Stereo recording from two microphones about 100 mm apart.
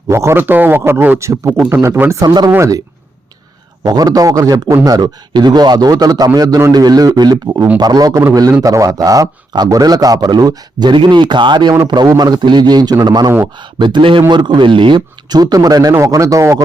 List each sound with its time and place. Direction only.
0.1 s speech: 25° right (ahead or behind)
2.2 s a man's voice: 45° right (ahead or behind)
3.8 s a man's voice: 40° right (ahead or behind)